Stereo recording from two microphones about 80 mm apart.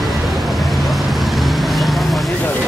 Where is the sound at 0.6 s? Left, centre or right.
Centre.